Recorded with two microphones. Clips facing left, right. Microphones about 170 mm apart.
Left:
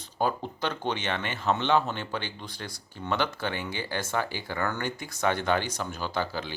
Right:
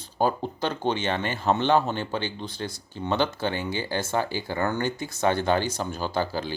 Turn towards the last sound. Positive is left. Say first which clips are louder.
# right 4 dB
turn(degrees=-35)  # may be behind; listen again after turning